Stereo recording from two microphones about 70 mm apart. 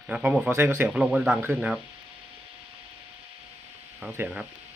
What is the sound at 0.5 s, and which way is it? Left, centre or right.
Speech, right.